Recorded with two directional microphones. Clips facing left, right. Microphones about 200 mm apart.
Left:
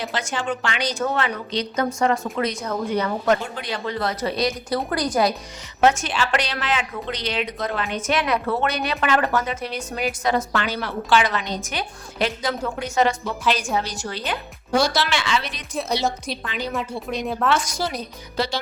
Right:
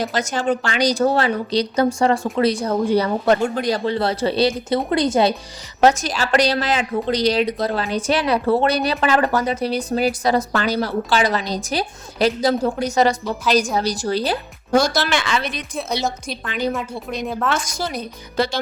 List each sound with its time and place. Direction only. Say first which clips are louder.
0.0 s a woman's voice: right 5 dB; 40° right (ahead or behind); by 5.3 s 25° right (ahead or behind)
5.8 s a woman's voice: right 3 dB; 35° right (ahead or behind)
15.7 s a woman's voice: left 2 dB; centre (ahead or behind)
16.5 s a woman's voice: right 9 dB; 50° right (ahead or behind)
16.7 s a woman's voice: even; centre (ahead or behind)
17.5 s a woman's voice: left 1 dB; 45° right (ahead or behind)